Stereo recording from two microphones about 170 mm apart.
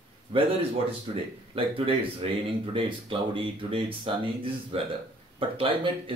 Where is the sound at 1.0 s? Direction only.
30° right (ahead or behind).